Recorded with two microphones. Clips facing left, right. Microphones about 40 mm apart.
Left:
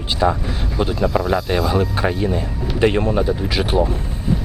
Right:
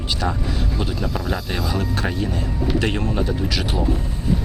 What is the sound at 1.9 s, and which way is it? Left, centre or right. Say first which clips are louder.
Speech: left 4 dB; centre.